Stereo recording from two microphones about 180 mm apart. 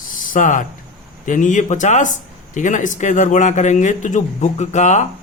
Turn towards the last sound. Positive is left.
turn(degrees=40)  # may be behind; listen again after turning